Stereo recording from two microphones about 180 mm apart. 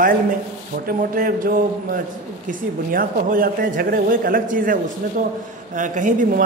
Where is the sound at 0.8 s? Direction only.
50° right (ahead or behind).